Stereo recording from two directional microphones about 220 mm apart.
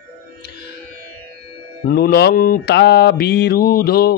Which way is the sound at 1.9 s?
45° left (ahead or behind).